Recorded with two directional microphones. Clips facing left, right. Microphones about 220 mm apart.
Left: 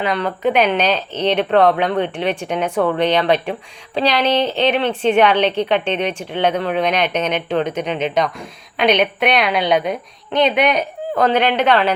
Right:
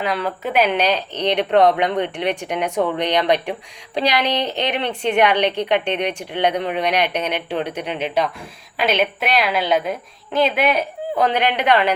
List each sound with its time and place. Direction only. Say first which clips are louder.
0.0 s a woman's voice: left 4 dB; 5° right (ahead or behind)